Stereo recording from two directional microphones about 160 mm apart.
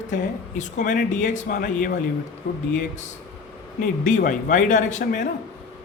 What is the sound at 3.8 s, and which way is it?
Speech, 55° left (ahead or behind).